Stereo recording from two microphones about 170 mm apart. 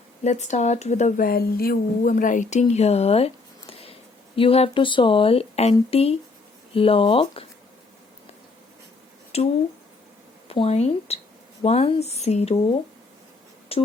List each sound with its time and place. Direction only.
0.3 s speech: 45° left (ahead or behind)
9.3 s speech: 35° left (ahead or behind)
10.5 s speech: 35° left (ahead or behind)
13.7 s a sound: 35° left (ahead or behind)